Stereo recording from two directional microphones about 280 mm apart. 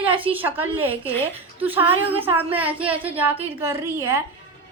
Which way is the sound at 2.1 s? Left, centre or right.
Centre.